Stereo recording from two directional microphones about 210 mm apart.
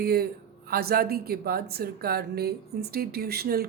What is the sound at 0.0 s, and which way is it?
Speech, 45° right (ahead or behind).